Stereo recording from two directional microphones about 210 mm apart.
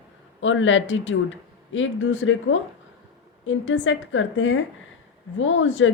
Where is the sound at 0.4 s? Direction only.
65° left (ahead or behind).